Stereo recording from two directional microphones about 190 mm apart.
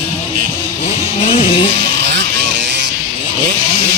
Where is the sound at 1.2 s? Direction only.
35° left (ahead or behind).